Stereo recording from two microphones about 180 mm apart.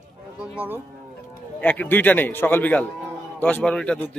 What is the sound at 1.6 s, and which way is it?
A man's voice, 10° left (ahead or behind).